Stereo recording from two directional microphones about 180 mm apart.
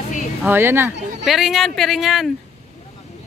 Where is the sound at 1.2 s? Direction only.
Centre (ahead or behind).